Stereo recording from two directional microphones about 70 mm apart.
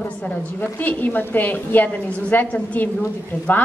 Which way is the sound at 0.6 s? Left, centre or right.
Left.